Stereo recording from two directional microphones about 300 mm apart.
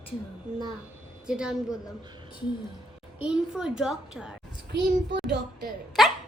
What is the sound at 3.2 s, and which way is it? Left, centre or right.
Child singing, centre.